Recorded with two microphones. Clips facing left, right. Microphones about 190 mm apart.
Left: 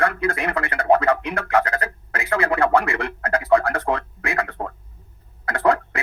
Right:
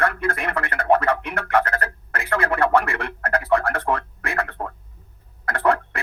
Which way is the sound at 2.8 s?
15° left (ahead or behind).